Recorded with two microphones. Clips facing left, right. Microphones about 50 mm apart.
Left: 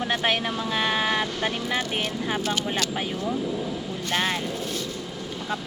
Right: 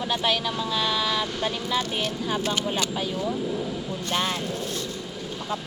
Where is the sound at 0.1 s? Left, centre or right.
Left.